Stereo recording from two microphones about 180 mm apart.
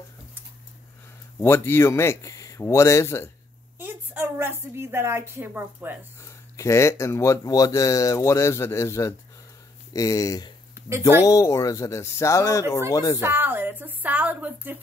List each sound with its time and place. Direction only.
1.4 s speech: 15° left (ahead or behind)
3.8 s a woman's voice: 10° right (ahead or behind)
6.5 s speech: 15° left (ahead or behind)
10.9 s a woman's voice: 15° right (ahead or behind)
11.2 s speech: 20° left (ahead or behind)
13.2 s a woman's voice: 10° right (ahead or behind)